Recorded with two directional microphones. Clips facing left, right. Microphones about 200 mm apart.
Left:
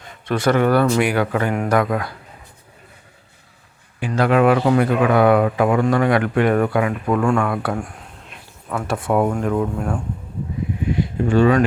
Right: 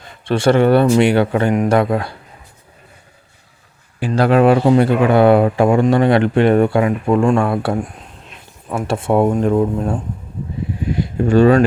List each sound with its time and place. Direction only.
0.3 s speech: 30° right (ahead or behind)
4.0 s speech: 35° right (ahead or behind)
10.9 s speech: 40° right (ahead or behind)